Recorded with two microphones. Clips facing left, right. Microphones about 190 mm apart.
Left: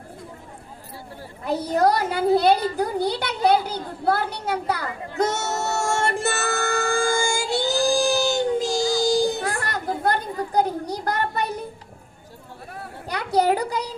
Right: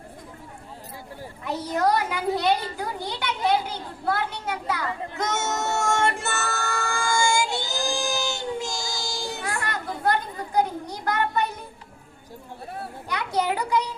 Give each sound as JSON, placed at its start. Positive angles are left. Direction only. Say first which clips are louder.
{"t": 1.5, "sound": "a child's voice", "louder": "left 4 dB", "side_deg": 35}
{"t": 4.1, "sound": "a sound", "louder": "left 4 dB", "side_deg": 35}
{"t": 13.1, "sound": "a child's voice", "louder": "left 5 dB", "side_deg": 35}